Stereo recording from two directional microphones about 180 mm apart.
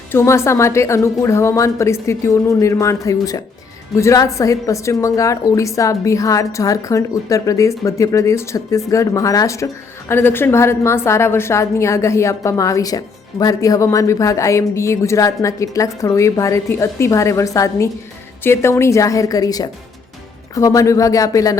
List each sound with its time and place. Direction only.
0.1 s a woman's voice: 15° left (ahead or behind)